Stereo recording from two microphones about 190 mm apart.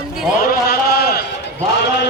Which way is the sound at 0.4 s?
55° left (ahead or behind).